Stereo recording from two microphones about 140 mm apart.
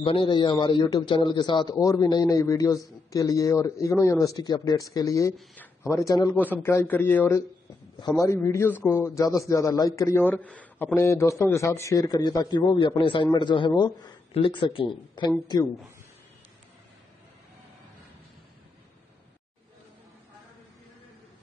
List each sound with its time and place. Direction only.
0.0 s a man's voice: 40° left (ahead or behind)
6.3 s a man's voice: 15° left (ahead or behind); by 15.6 s 30° left (ahead or behind)